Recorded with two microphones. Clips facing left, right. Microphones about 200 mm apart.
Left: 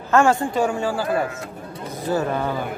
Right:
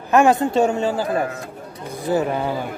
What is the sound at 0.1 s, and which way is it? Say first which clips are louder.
Speech: right 2 dB; 15° right (ahead or behind).